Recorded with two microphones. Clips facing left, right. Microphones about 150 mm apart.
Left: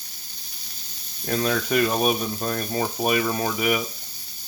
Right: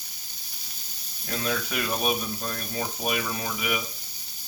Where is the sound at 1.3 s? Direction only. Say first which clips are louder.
Left 7 dB; 50° left (ahead or behind).